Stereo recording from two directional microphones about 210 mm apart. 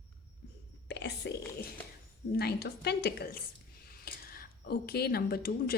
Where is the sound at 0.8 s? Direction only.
55° left (ahead or behind).